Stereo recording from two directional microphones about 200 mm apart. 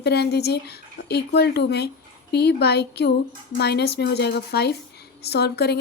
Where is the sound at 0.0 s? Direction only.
55° left (ahead or behind).